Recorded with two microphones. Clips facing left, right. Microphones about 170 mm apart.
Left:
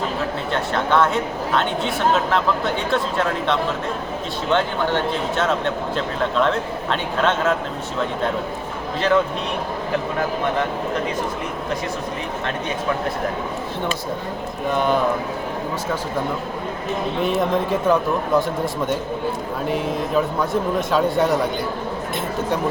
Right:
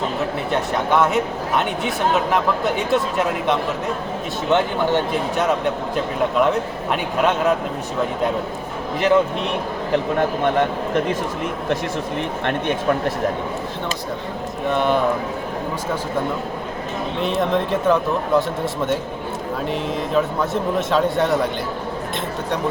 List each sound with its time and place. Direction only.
0.5 s speech: 15° right (ahead or behind)
2.9 s speech: 15° right (ahead or behind)
5.4 s speech: 15° right (ahead or behind)
9.0 s speech: 15° right (ahead or behind)
14.7 s a man's voice: centre (ahead or behind)
17.2 s a man's voice: centre (ahead or behind)